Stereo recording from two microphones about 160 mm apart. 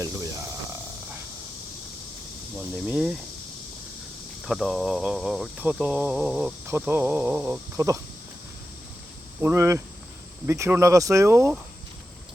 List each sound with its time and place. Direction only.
0.0 s a sound: 20° right (ahead or behind)
2.6 s cricket: 5° right (ahead or behind)
4.4 s cricket: centre (ahead or behind)
6.7 s speech: 15° right (ahead or behind)
9.4 s speech: 15° right (ahead or behind)